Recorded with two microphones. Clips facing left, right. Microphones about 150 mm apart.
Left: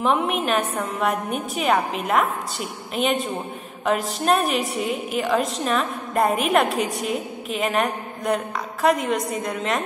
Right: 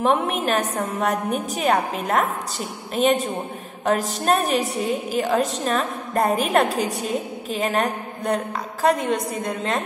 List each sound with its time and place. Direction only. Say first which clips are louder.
0.1 s a woman's voice: even; 40° right (ahead or behind)